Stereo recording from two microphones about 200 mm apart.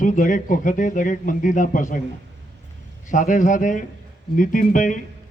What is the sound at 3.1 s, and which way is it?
Speech, 40° left (ahead or behind).